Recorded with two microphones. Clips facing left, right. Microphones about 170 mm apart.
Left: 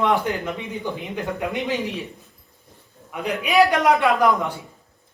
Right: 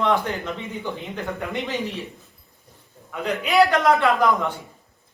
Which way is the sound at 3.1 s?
15° left (ahead or behind).